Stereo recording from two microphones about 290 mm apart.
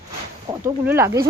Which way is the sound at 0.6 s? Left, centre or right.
Centre.